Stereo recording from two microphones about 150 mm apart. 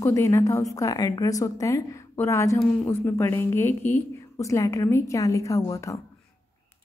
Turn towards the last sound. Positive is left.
turn(degrees=20)  # may be behind; listen again after turning